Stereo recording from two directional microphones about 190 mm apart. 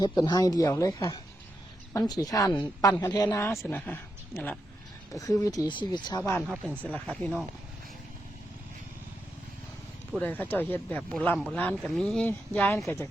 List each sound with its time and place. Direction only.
0.2 s a woman's voice: 20° left (ahead or behind)
10.1 s a woman's voice: 10° left (ahead or behind)